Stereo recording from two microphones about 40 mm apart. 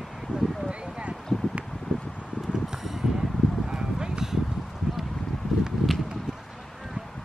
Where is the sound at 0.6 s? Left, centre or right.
Right.